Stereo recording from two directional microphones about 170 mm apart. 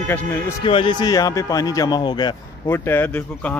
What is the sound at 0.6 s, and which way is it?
Speech, 30° left (ahead or behind).